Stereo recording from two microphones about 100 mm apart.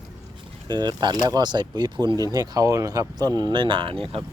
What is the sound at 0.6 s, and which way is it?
Speech, 45° right (ahead or behind).